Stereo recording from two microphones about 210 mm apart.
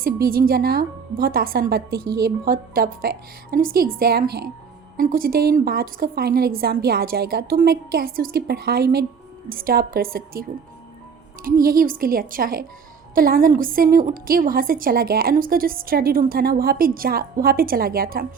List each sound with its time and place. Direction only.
0.0 s a woman's voice: 45° right (ahead or behind)
11.4 s a woman's voice: 45° right (ahead or behind)